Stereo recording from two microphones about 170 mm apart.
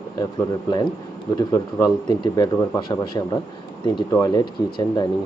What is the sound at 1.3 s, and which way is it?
A man's voice, 20° left (ahead or behind).